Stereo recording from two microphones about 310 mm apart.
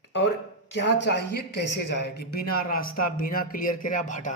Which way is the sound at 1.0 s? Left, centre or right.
Left.